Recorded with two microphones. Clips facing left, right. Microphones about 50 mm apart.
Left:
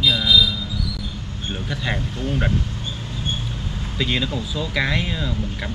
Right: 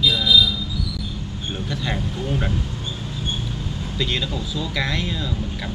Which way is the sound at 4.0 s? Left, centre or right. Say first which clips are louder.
Left 2 dB; centre.